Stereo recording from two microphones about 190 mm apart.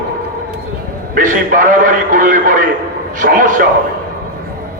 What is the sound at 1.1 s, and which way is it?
A man's voice, 45° right (ahead or behind).